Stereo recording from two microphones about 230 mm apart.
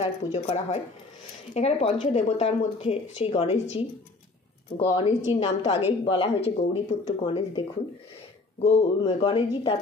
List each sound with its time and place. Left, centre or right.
0.0 s speech: left
8.6 s speech: left